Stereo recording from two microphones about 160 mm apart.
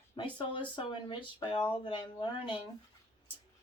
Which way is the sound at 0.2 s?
30° left (ahead or behind).